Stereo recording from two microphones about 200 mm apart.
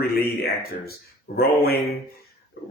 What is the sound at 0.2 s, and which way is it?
Speech, 50° left (ahead or behind).